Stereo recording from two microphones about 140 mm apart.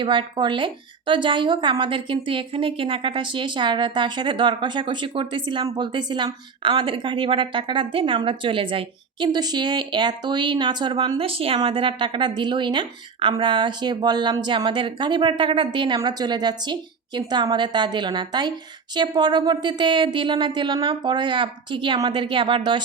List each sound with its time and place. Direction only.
0.0 s a woman's voice: 35° right (ahead or behind)